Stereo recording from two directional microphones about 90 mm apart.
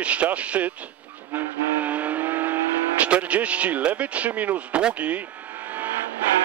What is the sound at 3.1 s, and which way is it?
A man's voice, 15° right (ahead or behind).